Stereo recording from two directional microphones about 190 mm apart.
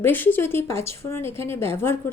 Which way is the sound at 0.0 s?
10° left (ahead or behind).